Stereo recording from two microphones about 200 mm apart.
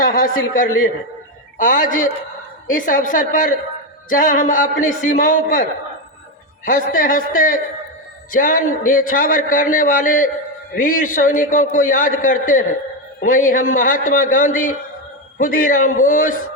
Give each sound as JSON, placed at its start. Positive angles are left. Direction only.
{"t": 0.0, "sound": "a man's voice", "side_deg": 45}
{"t": 6.7, "sound": "a man's voice", "side_deg": 40}